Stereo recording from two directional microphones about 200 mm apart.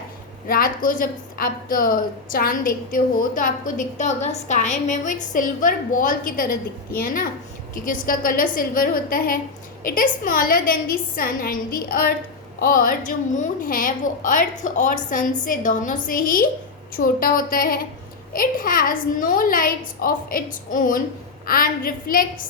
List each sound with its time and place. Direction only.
0.4 s a woman's voice: 45° left (ahead or behind)